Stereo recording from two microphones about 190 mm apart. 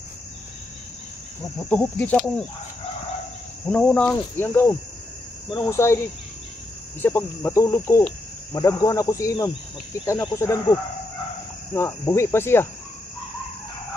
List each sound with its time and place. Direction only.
1.7 s speech: 10° left (ahead or behind)
3.6 s speech: 5° left (ahead or behind)
7.0 s speech: 10° left (ahead or behind)